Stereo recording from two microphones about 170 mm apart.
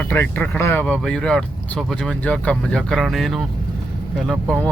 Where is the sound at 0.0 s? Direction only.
10° left (ahead or behind).